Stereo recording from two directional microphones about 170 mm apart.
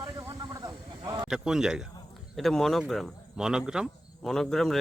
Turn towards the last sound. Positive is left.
turn(degrees=0)  # may be behind; listen again after turning